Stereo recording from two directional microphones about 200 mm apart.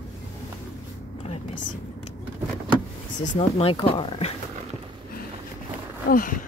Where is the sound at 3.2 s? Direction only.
30° left (ahead or behind).